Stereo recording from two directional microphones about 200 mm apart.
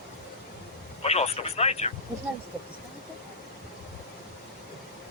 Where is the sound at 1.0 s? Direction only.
30° left (ahead or behind).